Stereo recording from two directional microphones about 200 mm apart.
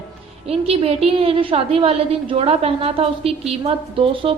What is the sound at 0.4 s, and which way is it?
A woman's voice, 30° right (ahead or behind).